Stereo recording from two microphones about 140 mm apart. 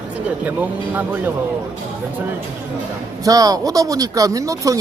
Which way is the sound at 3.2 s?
25° right (ahead or behind).